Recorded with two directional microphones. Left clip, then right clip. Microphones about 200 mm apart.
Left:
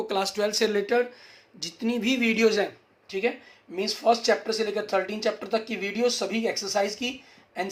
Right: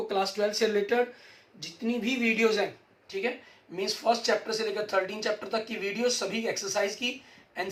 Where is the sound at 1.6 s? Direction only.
50° left (ahead or behind).